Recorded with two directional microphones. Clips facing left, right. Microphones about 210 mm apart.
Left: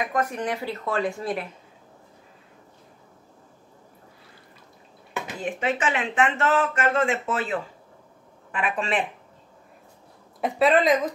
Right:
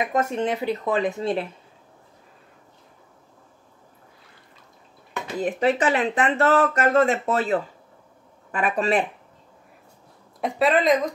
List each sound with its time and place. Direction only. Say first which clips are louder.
0.0 s speech: right 3 dB; 25° right (ahead or behind)
5.4 s speech: right 6 dB; 35° right (ahead or behind)
10.4 s a woman's voice: even; centre (ahead or behind)